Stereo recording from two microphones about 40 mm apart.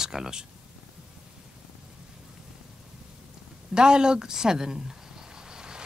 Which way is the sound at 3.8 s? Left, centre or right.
Right.